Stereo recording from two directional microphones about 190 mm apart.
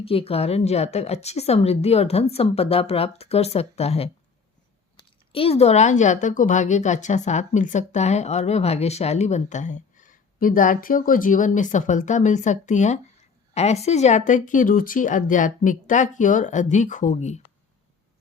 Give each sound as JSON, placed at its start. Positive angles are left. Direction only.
{"t": 0.0, "sound": "a woman's voice", "side_deg": 30}
{"t": 5.3, "sound": "a woman's voice", "side_deg": 30}